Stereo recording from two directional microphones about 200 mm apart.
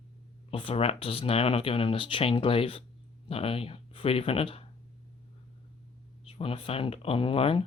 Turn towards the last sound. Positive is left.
turn(degrees=25)  # may be behind; listen again after turning